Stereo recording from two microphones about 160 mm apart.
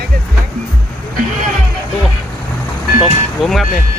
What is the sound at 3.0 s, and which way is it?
Speech, centre (ahead or behind).